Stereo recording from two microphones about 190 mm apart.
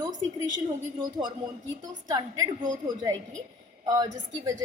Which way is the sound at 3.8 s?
20° right (ahead or behind).